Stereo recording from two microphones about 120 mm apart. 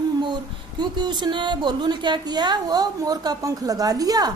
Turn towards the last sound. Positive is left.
turn(degrees=-30)  # may be behind; listen again after turning